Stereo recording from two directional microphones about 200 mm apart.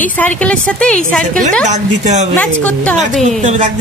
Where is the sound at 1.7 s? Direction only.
35° right (ahead or behind).